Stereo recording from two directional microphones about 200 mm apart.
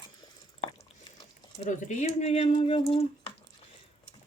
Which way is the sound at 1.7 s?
35° left (ahead or behind).